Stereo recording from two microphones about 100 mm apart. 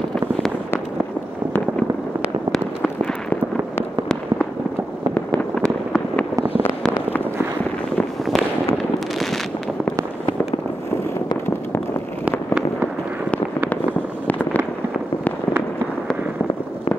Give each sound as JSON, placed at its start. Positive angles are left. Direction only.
{"t": 2.5, "sound": "fireworks", "side_deg": 10}
{"t": 5.1, "sound": "fireworks", "side_deg": 10}
{"t": 14.2, "sound": "fireworks", "side_deg": 15}